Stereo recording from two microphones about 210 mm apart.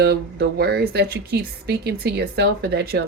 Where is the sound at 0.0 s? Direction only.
50° right (ahead or behind).